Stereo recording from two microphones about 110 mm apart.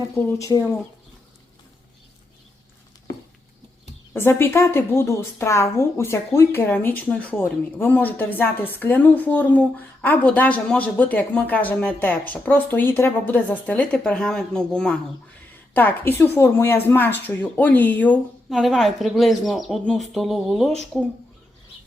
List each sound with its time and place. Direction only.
0.3 s speech: 30° left (ahead or behind)
4.1 s a woman's voice: 20° left (ahead or behind)
18.4 s speech: centre (ahead or behind)